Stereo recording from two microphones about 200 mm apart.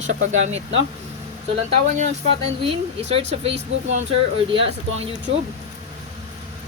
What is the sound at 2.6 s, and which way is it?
Speech, 30° right (ahead or behind).